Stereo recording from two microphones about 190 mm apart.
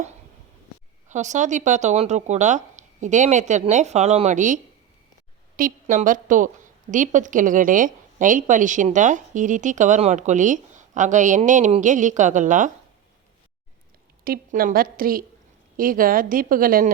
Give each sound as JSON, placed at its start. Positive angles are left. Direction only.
{"t": 1.0, "sound": "a woman's voice", "side_deg": -40}
{"t": 14.3, "sound": "a woman's voice", "side_deg": -50}